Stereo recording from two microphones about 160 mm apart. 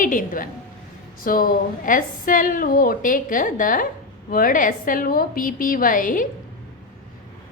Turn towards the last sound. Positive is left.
turn(degrees=55)  # may be behind; listen again after turning